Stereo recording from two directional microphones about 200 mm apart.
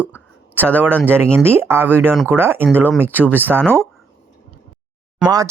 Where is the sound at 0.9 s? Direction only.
5° left (ahead or behind).